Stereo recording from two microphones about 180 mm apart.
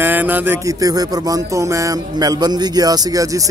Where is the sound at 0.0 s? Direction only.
10° right (ahead or behind).